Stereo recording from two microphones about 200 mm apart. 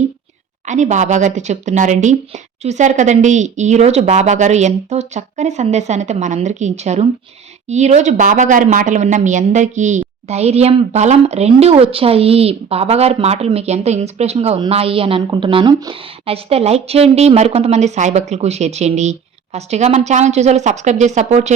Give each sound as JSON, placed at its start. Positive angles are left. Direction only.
{"t": 0.6, "sound": "speech", "side_deg": -35}